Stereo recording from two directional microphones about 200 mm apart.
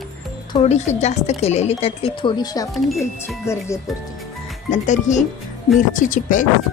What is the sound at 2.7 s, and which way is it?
Speech, centre (ahead or behind).